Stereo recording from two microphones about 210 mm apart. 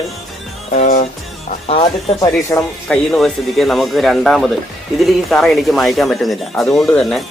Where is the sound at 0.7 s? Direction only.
35° left (ahead or behind).